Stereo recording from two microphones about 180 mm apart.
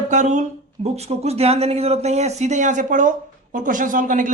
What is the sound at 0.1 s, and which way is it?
Speech, 40° right (ahead or behind).